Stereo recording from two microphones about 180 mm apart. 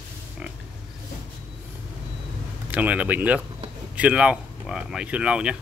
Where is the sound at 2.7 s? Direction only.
10° right (ahead or behind).